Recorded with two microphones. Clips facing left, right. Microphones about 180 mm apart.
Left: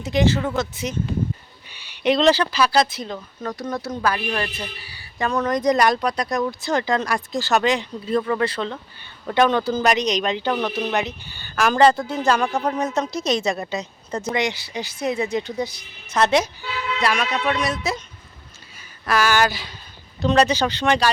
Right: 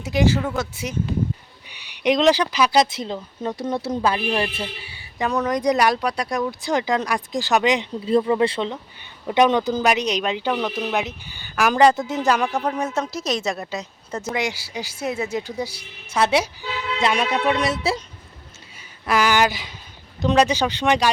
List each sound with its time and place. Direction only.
0.0 s speech: 10° right (ahead or behind); by 4.9 s 25° right (ahead or behind)
5.1 s speech: 15° right (ahead or behind)
11.3 s speech: 15° right (ahead or behind)
12.5 s speech: 5° right (ahead or behind); by 18.0 s 30° right (ahead or behind)
19.0 s speech: 20° right (ahead or behind)